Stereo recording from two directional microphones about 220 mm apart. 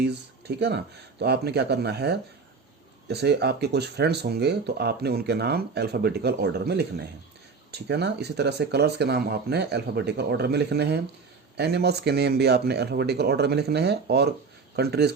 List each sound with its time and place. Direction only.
0.0 s speech: 50° right (ahead or behind)